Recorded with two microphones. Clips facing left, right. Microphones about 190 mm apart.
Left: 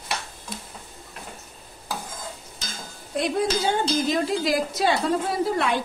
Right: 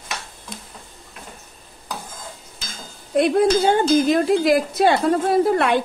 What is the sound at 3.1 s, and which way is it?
Speech, 60° right (ahead or behind).